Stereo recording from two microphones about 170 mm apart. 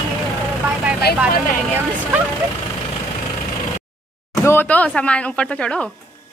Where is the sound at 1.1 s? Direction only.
70° left (ahead or behind).